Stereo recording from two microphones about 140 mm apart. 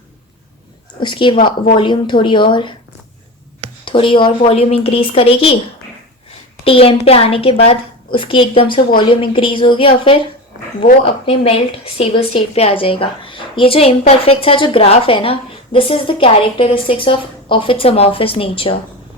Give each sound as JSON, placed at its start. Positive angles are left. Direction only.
{"t": 0.9, "sound": "a woman's voice", "side_deg": 35}
{"t": 3.8, "sound": "a woman's voice", "side_deg": 35}
{"t": 6.7, "sound": "a woman's voice", "side_deg": 45}